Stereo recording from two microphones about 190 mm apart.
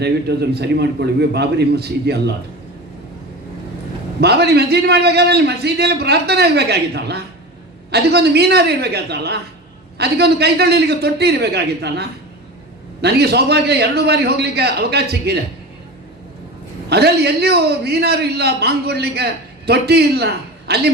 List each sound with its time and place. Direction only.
0.0 s a man's voice: 60° right (ahead or behind)
4.2 s a man's voice: 60° right (ahead or behind)
16.9 s a man's voice: 60° right (ahead or behind)